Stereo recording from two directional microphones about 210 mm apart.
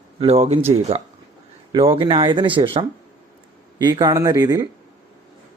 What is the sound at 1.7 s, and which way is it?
A man's voice, 25° right (ahead or behind).